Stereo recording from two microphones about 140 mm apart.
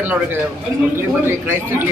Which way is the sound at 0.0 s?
15° right (ahead or behind).